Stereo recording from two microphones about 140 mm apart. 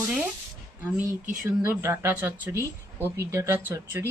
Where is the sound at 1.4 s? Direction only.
15° right (ahead or behind).